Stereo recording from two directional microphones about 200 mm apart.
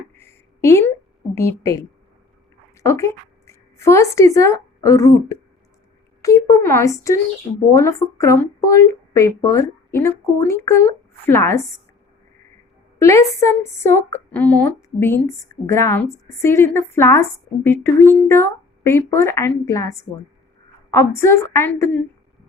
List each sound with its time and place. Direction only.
0.2 s a sound: 15° left (ahead or behind)
1.4 s a woman's voice: 15° left (ahead or behind)
13.0 s a woman's voice: 15° left (ahead or behind)